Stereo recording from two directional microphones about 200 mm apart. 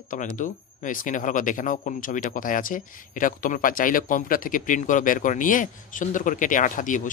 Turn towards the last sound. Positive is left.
turn(degrees=40)  # may be behind; listen again after turning